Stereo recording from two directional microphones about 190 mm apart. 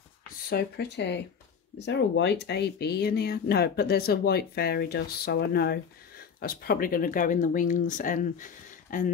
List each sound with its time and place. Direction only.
0.5 s speech: 60° left (ahead or behind)